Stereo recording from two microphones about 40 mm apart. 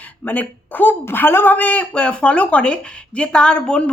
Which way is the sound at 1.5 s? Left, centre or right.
Left.